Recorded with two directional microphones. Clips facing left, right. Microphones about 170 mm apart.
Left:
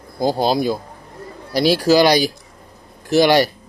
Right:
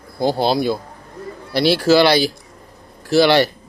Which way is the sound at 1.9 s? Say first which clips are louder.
Even; 15° left (ahead or behind).